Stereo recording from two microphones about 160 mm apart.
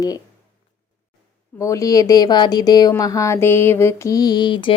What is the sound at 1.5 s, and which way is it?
Speech, 20° left (ahead or behind).